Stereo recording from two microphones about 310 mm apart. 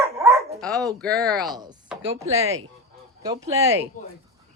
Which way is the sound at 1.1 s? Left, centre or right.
Right.